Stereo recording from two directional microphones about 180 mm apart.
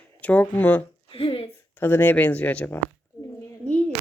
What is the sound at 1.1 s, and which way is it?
Speech, 30° left (ahead or behind).